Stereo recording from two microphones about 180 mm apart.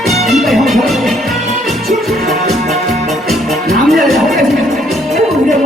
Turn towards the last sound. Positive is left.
turn(degrees=0)  # may be behind; listen again after turning